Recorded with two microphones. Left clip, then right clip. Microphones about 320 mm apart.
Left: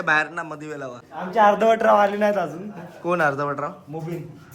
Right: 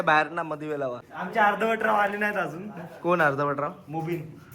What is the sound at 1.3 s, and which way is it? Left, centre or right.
Speech, left.